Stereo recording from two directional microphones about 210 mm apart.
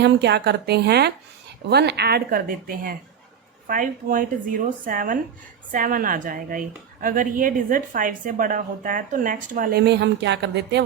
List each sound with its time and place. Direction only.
0.0 s speech: 55° right (ahead or behind)